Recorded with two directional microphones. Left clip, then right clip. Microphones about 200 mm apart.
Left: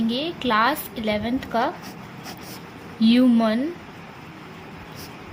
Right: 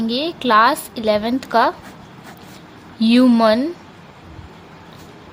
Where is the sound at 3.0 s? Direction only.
50° right (ahead or behind).